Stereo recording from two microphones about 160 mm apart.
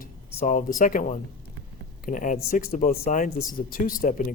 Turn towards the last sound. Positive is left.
turn(degrees=55)  # may be behind; listen again after turning